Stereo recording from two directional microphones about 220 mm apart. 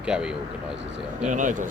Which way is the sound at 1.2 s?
35° right (ahead or behind).